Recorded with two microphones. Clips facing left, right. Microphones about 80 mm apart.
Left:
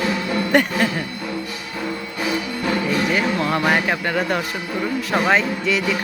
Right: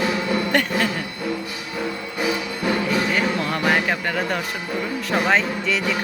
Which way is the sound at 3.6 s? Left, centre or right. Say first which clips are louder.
Left 1 dB; centre.